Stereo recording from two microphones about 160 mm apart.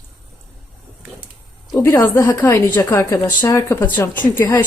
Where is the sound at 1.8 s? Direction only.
15° left (ahead or behind).